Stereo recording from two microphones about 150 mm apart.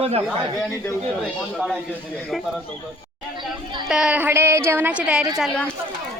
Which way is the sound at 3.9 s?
5° right (ahead or behind).